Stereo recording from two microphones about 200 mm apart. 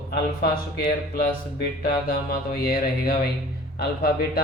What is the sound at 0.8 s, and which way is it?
A man's voice, 50° left (ahead or behind).